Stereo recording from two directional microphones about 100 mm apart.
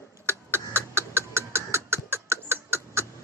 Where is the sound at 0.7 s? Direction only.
25° right (ahead or behind).